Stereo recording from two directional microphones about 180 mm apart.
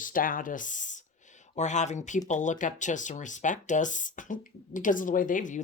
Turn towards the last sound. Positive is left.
turn(degrees=45)  # may be behind; listen again after turning